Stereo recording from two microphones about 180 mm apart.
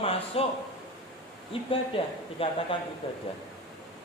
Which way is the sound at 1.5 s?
30° left (ahead or behind).